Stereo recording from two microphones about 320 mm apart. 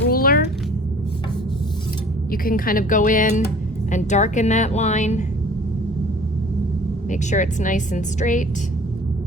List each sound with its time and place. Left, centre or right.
0.0 s a sound: left
2.3 s speech: left
7.1 s speech: left